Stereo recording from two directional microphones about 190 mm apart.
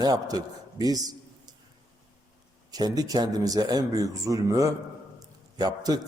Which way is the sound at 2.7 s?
20° right (ahead or behind).